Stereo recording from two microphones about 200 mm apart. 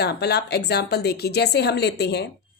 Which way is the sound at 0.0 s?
55° left (ahead or behind).